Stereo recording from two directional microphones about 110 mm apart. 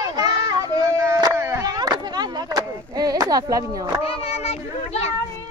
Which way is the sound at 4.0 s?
60° left (ahead or behind).